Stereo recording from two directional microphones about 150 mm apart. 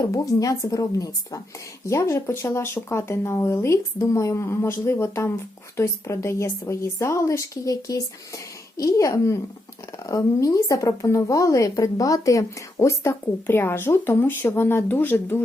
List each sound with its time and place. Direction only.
0.1 s speech: 20° left (ahead or behind)